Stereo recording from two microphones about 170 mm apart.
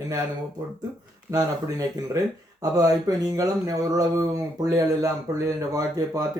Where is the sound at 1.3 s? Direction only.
20° right (ahead or behind).